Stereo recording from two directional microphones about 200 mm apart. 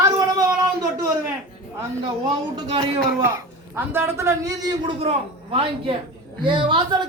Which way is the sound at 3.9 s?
10° right (ahead or behind).